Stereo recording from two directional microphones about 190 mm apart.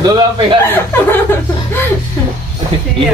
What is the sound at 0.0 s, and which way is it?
Speech, 20° right (ahead or behind).